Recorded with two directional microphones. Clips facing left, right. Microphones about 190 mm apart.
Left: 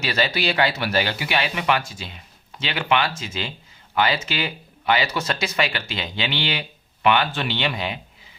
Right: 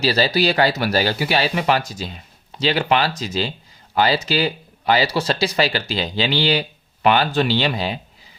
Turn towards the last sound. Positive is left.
turn(degrees=-35)  # may be behind; listen again after turning